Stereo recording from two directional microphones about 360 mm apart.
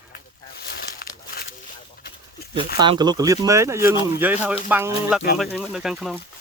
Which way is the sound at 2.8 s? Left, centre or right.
Centre.